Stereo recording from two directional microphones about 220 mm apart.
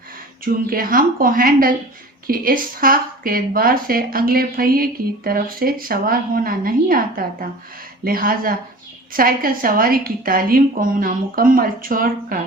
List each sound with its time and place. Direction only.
0.4 s a woman's voice: 40° right (ahead or behind)